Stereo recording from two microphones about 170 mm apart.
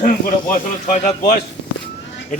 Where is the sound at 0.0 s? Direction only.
50° left (ahead or behind).